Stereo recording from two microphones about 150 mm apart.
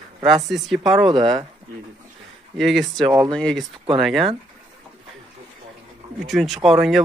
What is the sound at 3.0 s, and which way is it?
Speech, 25° right (ahead or behind).